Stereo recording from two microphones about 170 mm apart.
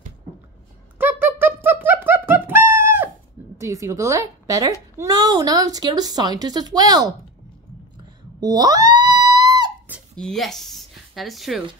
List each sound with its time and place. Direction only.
0.9 s music: 10° right (ahead or behind)
3.5 s a woman's voice: 20° right (ahead or behind)
8.4 s a sound: 20° right (ahead or behind)
10.1 s speech: 5° left (ahead or behind)